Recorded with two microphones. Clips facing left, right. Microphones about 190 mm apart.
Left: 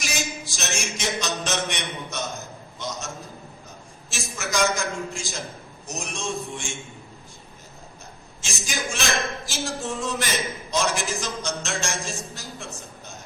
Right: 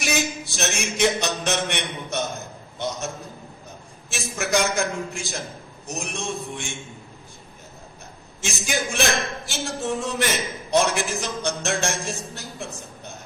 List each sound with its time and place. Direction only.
0.0 s a sound: 60° right (ahead or behind)
4.1 s a man's voice: 60° right (ahead or behind)
8.4 s a man's voice: 60° right (ahead or behind)